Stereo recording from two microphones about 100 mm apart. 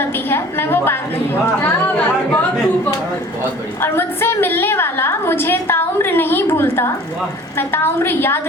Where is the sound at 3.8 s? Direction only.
20° left (ahead or behind).